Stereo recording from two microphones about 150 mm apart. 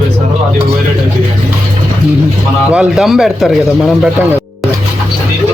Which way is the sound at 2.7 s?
5° right (ahead or behind).